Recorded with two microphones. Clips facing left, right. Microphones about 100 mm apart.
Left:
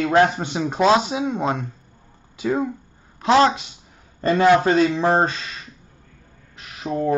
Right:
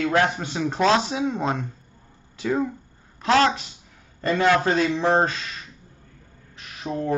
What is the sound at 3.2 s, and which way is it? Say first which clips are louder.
Speech: left 3 dB; 20° left (ahead or behind).